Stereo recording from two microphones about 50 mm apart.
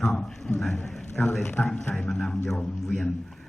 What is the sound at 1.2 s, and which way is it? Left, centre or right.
Speech, left.